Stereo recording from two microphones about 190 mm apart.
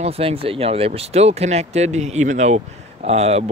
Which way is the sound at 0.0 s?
30° right (ahead or behind).